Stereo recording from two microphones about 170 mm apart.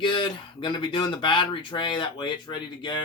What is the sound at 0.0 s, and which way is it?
Speech, 30° left (ahead or behind).